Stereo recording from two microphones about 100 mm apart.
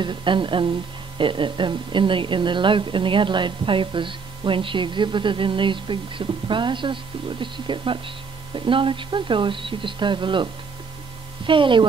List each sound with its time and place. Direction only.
0.0 s speech: 55° right (ahead or behind)